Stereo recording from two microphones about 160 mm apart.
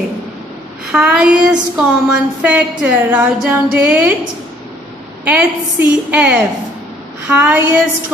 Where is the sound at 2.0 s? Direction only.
10° right (ahead or behind).